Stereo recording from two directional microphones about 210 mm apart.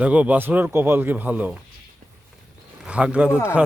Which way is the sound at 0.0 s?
5° right (ahead or behind).